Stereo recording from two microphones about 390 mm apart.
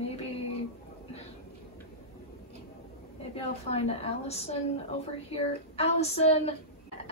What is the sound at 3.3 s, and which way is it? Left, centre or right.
A woman's voice, centre.